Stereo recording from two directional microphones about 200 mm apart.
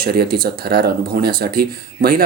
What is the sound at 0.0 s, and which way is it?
Speech, 50° right (ahead or behind).